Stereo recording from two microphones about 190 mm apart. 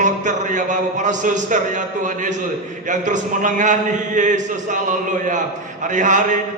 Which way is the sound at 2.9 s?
40° right (ahead or behind).